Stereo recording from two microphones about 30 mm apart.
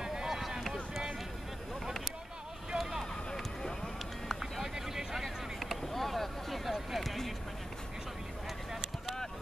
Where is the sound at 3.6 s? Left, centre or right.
Centre.